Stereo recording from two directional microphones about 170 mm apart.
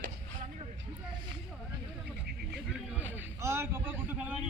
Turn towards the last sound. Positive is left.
turn(degrees=-10)  # may be behind; listen again after turning